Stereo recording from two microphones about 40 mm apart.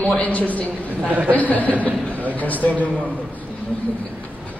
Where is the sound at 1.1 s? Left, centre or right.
Right.